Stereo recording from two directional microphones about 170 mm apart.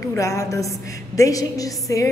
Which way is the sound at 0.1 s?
20° left (ahead or behind).